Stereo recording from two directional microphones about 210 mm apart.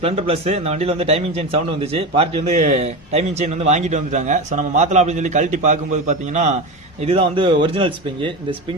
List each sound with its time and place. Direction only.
0.0 s a man's voice: 30° right (ahead or behind)